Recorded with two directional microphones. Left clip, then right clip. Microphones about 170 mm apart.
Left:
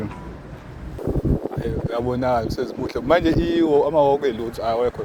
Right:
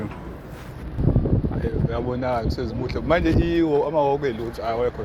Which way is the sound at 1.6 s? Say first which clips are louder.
Left 2 dB; 90° left.